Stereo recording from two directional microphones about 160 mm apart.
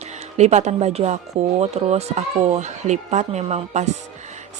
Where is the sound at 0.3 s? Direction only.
45° right (ahead or behind).